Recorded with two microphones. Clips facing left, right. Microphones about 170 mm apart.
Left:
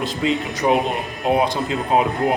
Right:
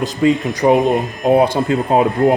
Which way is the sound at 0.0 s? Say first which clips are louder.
Right 6 dB; 45° right (ahead or behind).